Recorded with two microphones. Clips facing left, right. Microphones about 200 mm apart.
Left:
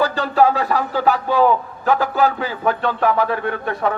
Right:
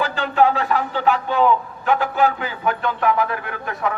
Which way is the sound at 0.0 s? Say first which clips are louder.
Left 2 dB; 35° left (ahead or behind).